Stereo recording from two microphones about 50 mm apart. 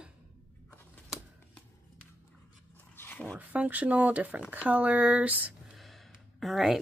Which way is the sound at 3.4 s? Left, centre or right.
Right.